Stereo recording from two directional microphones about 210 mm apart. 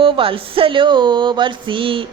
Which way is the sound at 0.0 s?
25° right (ahead or behind).